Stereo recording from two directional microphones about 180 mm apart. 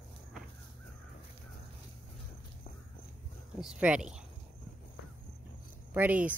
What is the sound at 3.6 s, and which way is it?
Speech, 5° right (ahead or behind).